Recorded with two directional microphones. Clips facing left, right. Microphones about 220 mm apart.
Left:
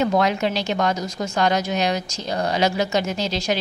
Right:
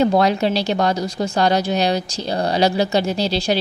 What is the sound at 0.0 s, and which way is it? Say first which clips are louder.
Speech: right 4 dB; 35° right (ahead or behind).